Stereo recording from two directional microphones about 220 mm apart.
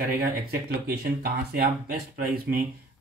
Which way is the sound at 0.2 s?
45° right (ahead or behind).